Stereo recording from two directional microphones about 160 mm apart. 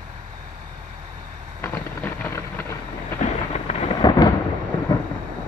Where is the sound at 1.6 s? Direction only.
10° left (ahead or behind).